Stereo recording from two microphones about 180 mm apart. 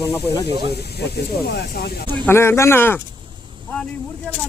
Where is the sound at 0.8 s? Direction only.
65° left (ahead or behind).